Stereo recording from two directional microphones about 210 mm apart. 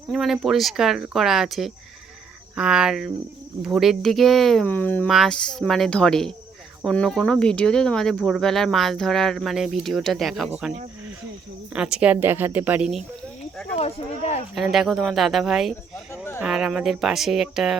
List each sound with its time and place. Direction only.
0.1 s a woman's voice: centre (ahead or behind)
13.7 s speech: 30° left (ahead or behind)
14.5 s speech: centre (ahead or behind)